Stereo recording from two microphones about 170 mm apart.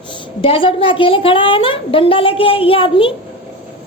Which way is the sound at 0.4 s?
30° left (ahead or behind).